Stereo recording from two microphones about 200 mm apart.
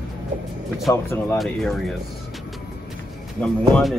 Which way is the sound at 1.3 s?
Centre (ahead or behind).